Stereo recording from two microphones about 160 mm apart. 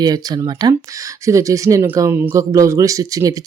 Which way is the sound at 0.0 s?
25° right (ahead or behind).